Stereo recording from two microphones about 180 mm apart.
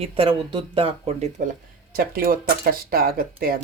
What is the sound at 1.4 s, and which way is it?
Speech, 45° right (ahead or behind).